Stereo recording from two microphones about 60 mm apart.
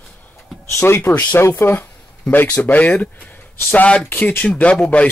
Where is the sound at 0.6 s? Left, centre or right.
Left.